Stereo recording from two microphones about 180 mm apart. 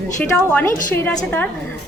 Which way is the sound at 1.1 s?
10° left (ahead or behind).